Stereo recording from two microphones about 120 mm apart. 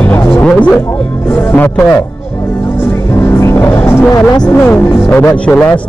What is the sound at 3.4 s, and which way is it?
A man's voice, 15° left (ahead or behind).